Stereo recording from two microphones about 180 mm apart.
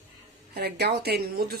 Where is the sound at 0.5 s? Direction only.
65° right (ahead or behind).